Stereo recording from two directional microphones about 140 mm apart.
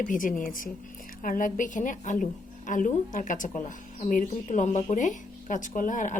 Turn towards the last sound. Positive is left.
turn(degrees=70)  # may be behind; listen again after turning